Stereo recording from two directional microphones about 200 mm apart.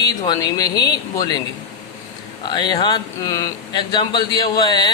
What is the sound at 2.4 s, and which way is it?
Speech, 20° left (ahead or behind).